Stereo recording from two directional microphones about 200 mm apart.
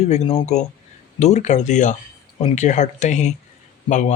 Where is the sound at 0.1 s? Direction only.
35° left (ahead or behind).